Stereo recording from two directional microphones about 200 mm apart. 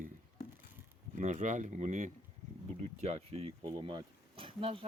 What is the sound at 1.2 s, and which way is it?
Speech, 40° right (ahead or behind).